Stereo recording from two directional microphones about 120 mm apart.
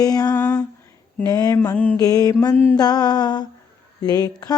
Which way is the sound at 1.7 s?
10° left (ahead or behind).